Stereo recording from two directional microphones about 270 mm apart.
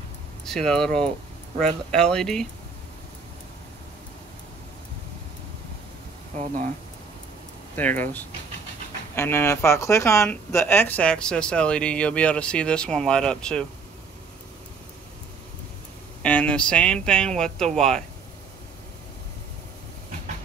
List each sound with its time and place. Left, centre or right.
0.5 s speech: centre
6.3 s speech: right
7.7 s speech: centre
16.2 s speech: centre